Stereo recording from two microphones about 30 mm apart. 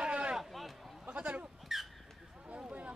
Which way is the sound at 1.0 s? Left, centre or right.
Right.